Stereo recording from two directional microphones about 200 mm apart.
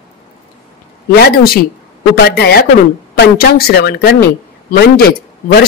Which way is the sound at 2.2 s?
50° left (ahead or behind).